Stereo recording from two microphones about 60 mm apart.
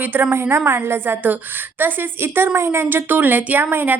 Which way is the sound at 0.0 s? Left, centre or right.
Right.